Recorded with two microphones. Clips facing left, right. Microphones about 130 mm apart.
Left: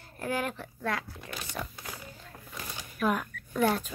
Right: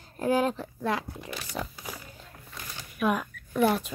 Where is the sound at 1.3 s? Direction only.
5° right (ahead or behind).